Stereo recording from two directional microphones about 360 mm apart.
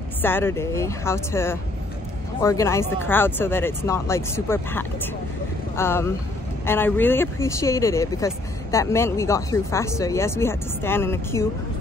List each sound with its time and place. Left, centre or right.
0.2 s speech: centre